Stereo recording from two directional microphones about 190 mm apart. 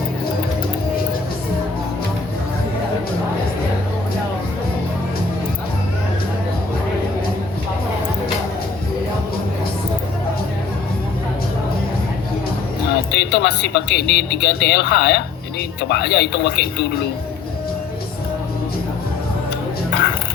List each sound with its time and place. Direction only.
13.1 s speech: 65° left (ahead or behind)